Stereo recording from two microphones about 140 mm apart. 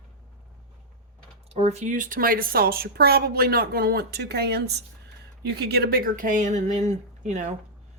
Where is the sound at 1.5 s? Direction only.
50° right (ahead or behind); by 4.1 s 90° right.